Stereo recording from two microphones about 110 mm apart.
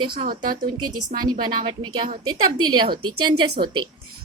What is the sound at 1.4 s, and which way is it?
A woman's voice, 45° right (ahead or behind).